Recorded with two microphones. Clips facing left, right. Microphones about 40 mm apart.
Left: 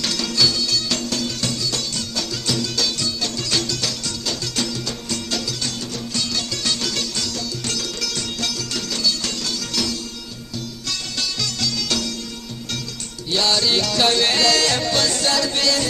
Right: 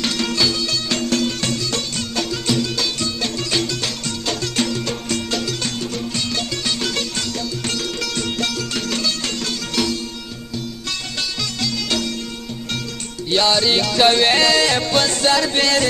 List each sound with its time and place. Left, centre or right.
0.0 s music: right
6.1 s music: right
11.6 s music: right
13.3 s music: right